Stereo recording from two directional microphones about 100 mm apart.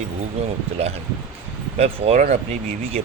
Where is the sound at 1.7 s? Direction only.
90° right.